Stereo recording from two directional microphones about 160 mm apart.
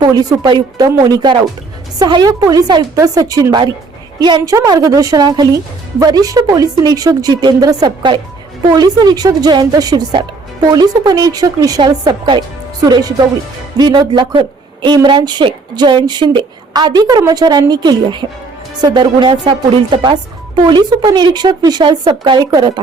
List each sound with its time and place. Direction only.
0.0 s speech: 25° right (ahead or behind)